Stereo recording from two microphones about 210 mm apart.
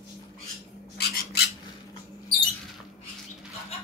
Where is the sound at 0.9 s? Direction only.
50° left (ahead or behind).